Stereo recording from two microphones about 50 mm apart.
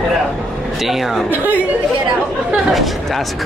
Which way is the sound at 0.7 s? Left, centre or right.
Centre.